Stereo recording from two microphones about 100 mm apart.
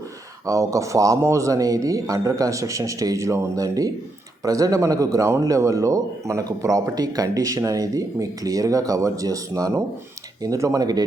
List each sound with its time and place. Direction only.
0.4 s a man's voice: 35° right (ahead or behind)